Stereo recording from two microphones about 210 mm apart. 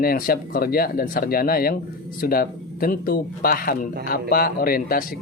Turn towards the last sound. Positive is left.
turn(degrees=45)  # may be behind; listen again after turning